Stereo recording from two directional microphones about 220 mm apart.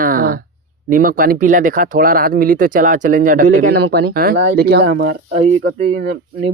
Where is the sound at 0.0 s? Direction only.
40° right (ahead or behind).